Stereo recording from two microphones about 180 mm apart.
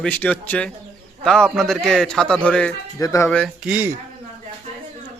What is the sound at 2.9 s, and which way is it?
Speech, 15° left (ahead or behind).